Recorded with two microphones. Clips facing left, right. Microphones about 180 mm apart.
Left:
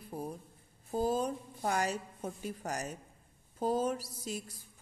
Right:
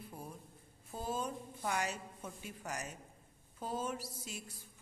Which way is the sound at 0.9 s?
40° left (ahead or behind).